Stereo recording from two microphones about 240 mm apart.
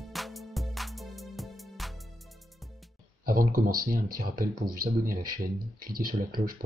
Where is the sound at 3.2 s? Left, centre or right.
Right.